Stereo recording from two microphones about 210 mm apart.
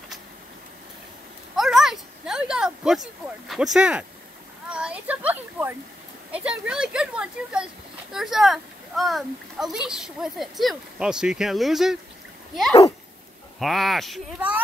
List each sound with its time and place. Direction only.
1.5 s a sound: centre (ahead or behind)
6.3 s a child's voice: 5° right (ahead or behind)
13.6 s a child's voice: centre (ahead or behind)